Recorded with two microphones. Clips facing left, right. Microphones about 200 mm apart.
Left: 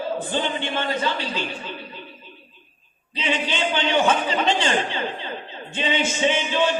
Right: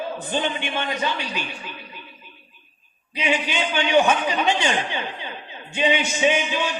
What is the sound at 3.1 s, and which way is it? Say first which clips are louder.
A man's voice: right 1 dB; 15° right (ahead or behind).